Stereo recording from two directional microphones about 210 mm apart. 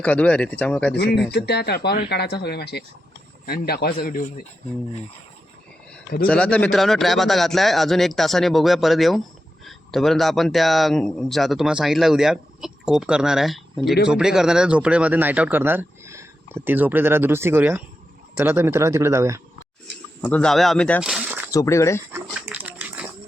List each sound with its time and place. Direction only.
0.0 s speech: 5° left (ahead or behind)
0.9 s speech: 50° left (ahead or behind)
6.2 s speech: 5° left (ahead or behind); by 19.4 s 15° right (ahead or behind)
20.2 s speech: 5° left (ahead or behind)
21.5 s speech: 15° left (ahead or behind)
22.1 s dog: 5° right (ahead or behind)